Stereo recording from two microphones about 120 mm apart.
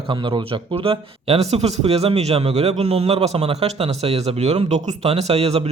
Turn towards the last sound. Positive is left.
turn(degrees=-55)  # may be behind; listen again after turning